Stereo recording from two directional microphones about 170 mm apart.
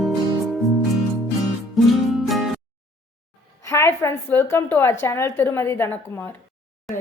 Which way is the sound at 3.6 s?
15° left (ahead or behind).